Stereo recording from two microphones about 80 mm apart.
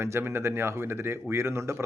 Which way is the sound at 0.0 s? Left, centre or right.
Right.